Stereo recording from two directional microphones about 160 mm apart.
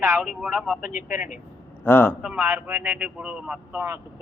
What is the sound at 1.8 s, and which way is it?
Speech, 15° left (ahead or behind).